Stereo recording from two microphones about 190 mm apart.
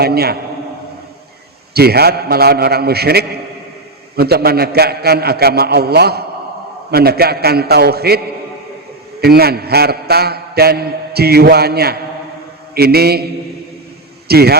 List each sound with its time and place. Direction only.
0.0 s a man's voice: 55° right (ahead or behind)
1.7 s a man's voice: 55° right (ahead or behind)
9.2 s a man's voice: 55° right (ahead or behind)
14.3 s a man's voice: 55° right (ahead or behind)